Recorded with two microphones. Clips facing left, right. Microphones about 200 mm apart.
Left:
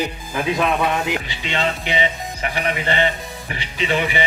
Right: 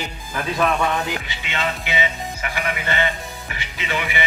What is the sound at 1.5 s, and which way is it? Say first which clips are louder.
Speech: left 3 dB; 30° left (ahead or behind).